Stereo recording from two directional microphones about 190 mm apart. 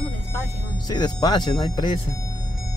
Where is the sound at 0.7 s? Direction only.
20° left (ahead or behind).